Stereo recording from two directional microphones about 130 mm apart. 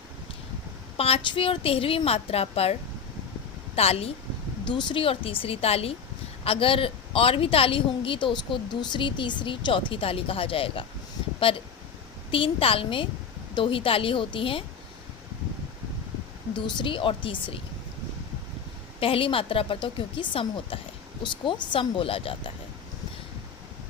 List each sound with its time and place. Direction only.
0.9 s a woman's voice: 50° left (ahead or behind)
3.8 s a woman's voice: 50° left (ahead or behind)
4.6 s a woman's voice: 35° left (ahead or behind)
16.6 s a woman's voice: 35° left (ahead or behind)
18.9 s a woman's voice: 45° left (ahead or behind)